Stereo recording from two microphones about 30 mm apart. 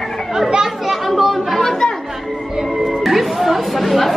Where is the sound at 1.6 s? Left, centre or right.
Centre.